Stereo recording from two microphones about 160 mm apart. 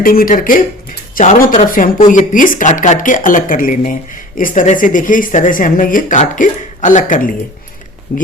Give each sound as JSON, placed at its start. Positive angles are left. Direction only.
{"t": 0.0, "sound": "speech", "side_deg": 65}